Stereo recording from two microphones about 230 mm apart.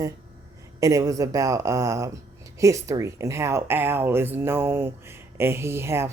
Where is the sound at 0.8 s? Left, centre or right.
Centre.